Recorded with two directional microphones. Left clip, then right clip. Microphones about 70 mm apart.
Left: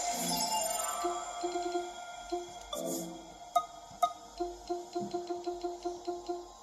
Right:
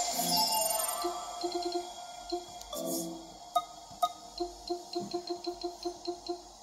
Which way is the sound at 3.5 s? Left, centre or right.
Right.